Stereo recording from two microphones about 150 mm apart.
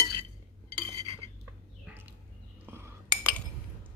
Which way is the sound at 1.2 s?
40° right (ahead or behind).